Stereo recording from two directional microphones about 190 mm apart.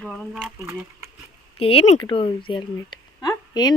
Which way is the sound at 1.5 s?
30° left (ahead or behind).